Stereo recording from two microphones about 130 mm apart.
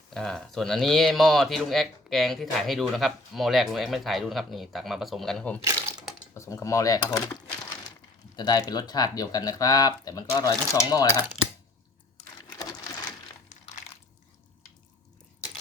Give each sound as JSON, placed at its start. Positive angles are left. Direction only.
{"t": 0.1, "sound": "speech", "side_deg": 5}
{"t": 6.3, "sound": "speech", "side_deg": 25}
{"t": 8.4, "sound": "speech", "side_deg": 30}
{"t": 13.5, "sound": "crushing", "side_deg": 65}